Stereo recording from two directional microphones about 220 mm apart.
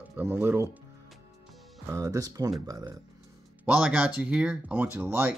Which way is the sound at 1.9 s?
15° right (ahead or behind).